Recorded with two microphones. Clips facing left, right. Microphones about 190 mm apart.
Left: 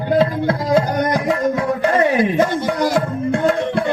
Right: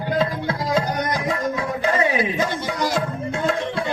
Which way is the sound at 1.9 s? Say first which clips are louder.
Left 7 dB; 50° left (ahead or behind).